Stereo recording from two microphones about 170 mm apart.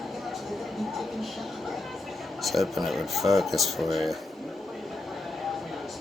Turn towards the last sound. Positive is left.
turn(degrees=0)  # may be behind; listen again after turning